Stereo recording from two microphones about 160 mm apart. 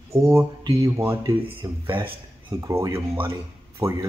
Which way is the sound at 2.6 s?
20° right (ahead or behind).